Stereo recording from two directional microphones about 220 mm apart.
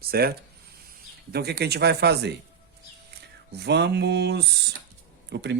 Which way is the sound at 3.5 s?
50° right (ahead or behind).